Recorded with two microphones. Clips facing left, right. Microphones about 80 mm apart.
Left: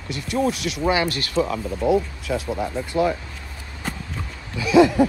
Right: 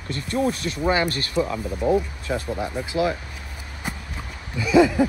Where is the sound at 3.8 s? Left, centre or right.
Centre.